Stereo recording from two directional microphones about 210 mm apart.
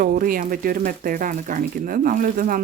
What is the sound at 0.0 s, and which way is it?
Speech, 45° right (ahead or behind).